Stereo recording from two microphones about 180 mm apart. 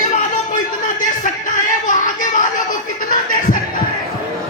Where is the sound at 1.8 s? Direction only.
45° left (ahead or behind).